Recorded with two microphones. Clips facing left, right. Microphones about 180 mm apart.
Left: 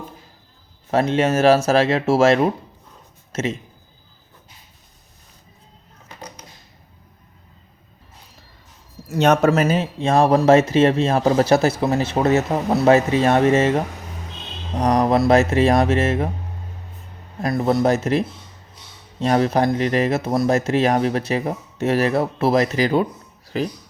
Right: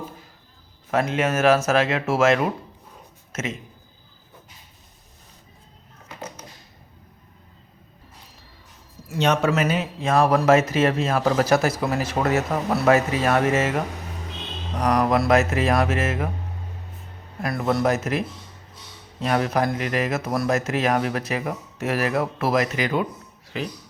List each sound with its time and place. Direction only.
0.9 s speech: 30° left (ahead or behind)
9.0 s speech: 45° left (ahead or behind)
9.5 s speech: 35° left (ahead or behind)
17.4 s speech: 25° left (ahead or behind)